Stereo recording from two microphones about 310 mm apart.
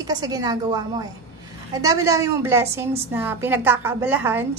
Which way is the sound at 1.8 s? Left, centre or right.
Centre.